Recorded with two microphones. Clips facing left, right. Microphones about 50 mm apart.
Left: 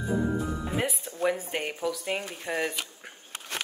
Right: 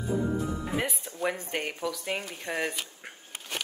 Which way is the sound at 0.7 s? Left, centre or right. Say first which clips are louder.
Left 3 dB; centre.